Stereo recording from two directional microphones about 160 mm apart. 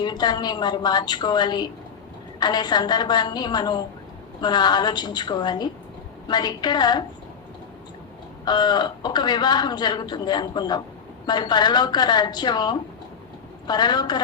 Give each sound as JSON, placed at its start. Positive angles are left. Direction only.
{"t": 0.0, "sound": "a man's voice", "side_deg": 25}
{"t": 8.4, "sound": "a man's voice", "side_deg": 25}